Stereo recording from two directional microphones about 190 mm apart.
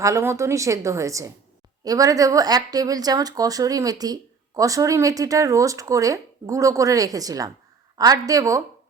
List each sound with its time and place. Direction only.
0.0 s speech: 15° right (ahead or behind)